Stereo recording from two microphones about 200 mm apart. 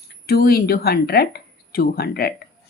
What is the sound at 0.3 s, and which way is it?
A woman's voice, 50° left (ahead or behind).